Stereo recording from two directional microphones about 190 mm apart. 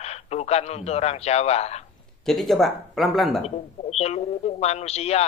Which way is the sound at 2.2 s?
Centre (ahead or behind).